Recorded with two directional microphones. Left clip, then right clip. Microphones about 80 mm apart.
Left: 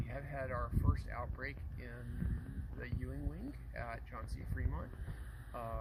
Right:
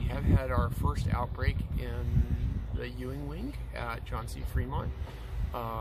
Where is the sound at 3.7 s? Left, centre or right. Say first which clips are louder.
Right 9 dB; right.